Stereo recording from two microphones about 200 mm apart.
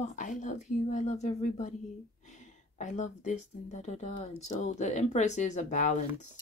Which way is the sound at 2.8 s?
40° left (ahead or behind).